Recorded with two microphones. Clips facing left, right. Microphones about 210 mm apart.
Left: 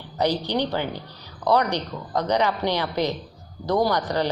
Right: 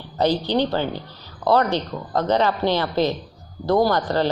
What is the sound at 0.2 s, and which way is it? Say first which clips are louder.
A woman's voice: right 3 dB; 15° left (ahead or behind).